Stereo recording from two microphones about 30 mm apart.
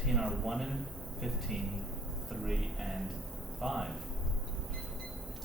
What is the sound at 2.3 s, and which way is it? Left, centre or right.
Speech, centre.